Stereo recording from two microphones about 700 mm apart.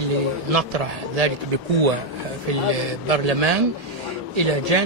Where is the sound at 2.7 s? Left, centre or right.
Right.